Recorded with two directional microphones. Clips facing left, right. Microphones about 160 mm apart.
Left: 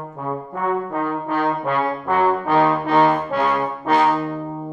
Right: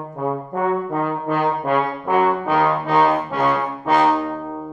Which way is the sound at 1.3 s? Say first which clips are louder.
Right 2 dB; 15° right (ahead or behind).